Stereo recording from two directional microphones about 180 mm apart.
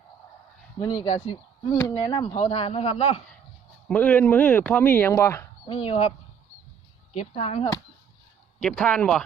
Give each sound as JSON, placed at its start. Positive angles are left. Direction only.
{"t": 0.8, "sound": "speech", "side_deg": 20}
{"t": 2.1, "sound": "speech", "side_deg": 25}
{"t": 2.4, "sound": "a man's voice", "side_deg": 35}
{"t": 3.8, "sound": "speech", "side_deg": 10}
{"t": 5.6, "sound": "a man's voice", "side_deg": 30}
{"t": 8.6, "sound": "speech", "side_deg": 5}